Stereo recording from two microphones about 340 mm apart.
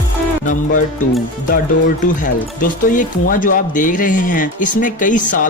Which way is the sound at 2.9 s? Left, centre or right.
Left.